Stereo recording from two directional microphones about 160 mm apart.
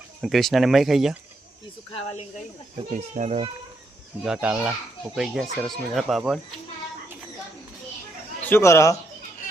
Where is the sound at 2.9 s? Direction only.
45° right (ahead or behind).